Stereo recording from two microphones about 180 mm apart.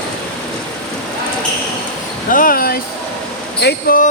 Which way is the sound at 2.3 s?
50° left (ahead or behind).